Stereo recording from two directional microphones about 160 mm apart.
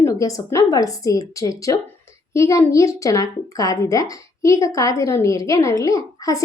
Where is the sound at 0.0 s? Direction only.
20° left (ahead or behind).